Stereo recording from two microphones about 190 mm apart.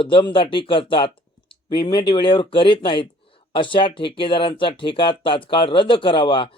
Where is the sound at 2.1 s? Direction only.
25° left (ahead or behind).